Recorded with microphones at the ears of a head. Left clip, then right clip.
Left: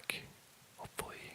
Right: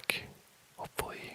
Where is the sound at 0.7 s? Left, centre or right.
Right.